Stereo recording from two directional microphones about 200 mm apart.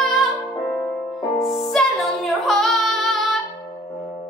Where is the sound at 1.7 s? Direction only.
Centre (ahead or behind).